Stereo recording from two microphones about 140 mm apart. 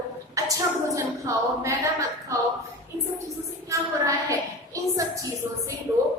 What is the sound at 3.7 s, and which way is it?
A woman's voice, 25° right (ahead or behind).